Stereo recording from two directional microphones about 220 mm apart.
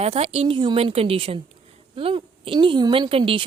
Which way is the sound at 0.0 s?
25° right (ahead or behind).